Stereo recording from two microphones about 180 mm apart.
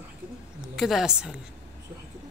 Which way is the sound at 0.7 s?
Centre (ahead or behind).